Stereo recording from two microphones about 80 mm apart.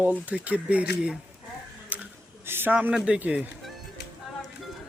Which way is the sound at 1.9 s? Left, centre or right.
Centre.